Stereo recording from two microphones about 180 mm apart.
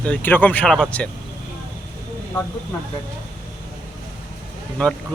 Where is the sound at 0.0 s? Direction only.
10° left (ahead or behind).